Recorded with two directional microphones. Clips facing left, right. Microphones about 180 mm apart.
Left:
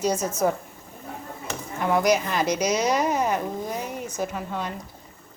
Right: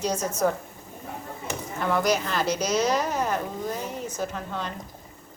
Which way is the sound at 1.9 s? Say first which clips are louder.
Left 3 dB; 10° left (ahead or behind).